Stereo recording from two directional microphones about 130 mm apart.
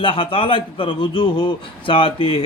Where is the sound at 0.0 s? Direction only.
40° left (ahead or behind).